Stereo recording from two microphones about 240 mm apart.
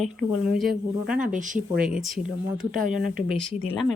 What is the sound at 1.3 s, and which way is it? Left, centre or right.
Speech, right.